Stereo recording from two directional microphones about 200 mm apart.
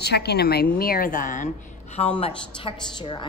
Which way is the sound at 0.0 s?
55° left (ahead or behind).